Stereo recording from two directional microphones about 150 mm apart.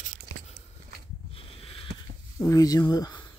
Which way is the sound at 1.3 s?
40° left (ahead or behind).